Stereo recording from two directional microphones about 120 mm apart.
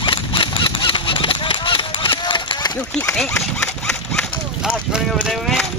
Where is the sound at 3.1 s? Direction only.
5° left (ahead or behind).